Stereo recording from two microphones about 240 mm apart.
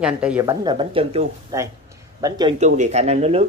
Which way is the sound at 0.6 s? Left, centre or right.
Right.